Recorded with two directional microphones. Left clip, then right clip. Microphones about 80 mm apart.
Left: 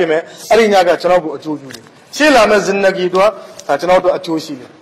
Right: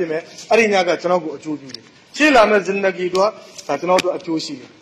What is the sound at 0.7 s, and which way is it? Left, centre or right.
A man's voice, left.